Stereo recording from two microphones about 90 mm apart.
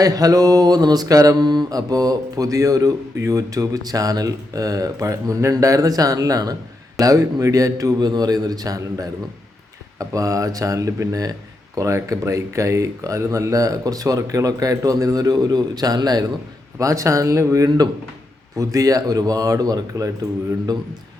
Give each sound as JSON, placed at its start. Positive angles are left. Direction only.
{"t": 0.0, "sound": "mantra", "side_deg": -45}
{"t": 7.9, "sound": "a man's voice", "side_deg": -50}
{"t": 10.0, "sound": "mantra", "side_deg": -40}
{"t": 16.7, "sound": "mantra", "side_deg": -35}